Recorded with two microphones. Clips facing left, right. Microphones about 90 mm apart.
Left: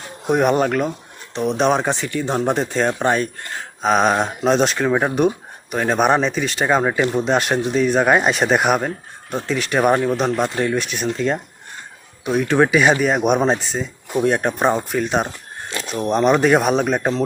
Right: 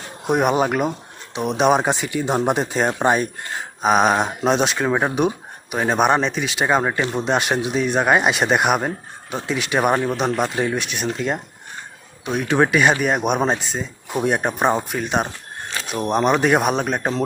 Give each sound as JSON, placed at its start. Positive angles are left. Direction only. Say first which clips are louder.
{"t": 0.3, "sound": "speech", "louder": "left 1 dB", "side_deg": -5}